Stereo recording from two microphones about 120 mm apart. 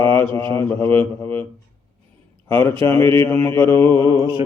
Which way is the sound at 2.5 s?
15° left (ahead or behind).